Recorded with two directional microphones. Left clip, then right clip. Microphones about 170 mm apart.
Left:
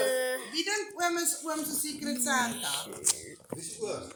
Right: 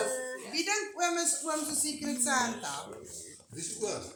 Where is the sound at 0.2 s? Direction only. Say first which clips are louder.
Left 4 dB; 25° left (ahead or behind).